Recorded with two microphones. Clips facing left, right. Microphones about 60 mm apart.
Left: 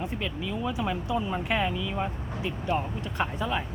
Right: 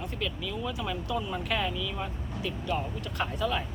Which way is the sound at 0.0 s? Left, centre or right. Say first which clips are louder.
Left 2 dB; left.